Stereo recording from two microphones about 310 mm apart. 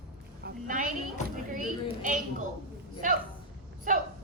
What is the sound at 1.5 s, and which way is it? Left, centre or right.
Speech, right.